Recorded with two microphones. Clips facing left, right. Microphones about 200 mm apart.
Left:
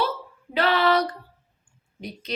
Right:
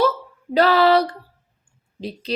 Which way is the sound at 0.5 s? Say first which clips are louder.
Right 6 dB; 40° right (ahead or behind).